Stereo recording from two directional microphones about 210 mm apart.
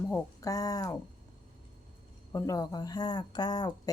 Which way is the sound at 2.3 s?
15° left (ahead or behind).